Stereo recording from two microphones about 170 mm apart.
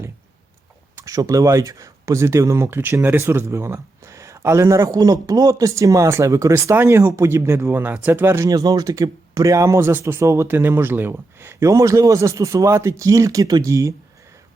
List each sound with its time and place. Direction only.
0.9 s speech: 20° right (ahead or behind)